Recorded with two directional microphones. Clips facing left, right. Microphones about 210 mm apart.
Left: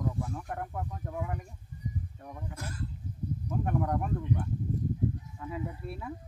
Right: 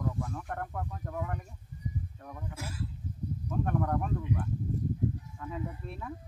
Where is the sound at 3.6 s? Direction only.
10° left (ahead or behind).